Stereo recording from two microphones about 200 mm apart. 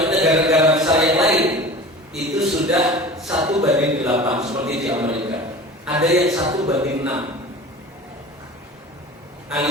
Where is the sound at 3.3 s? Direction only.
25° right (ahead or behind).